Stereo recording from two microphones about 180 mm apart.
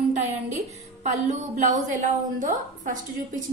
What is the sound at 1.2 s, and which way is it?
A woman's voice, 40° right (ahead or behind).